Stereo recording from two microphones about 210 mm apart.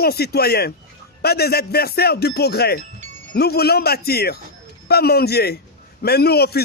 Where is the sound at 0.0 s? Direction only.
50° left (ahead or behind).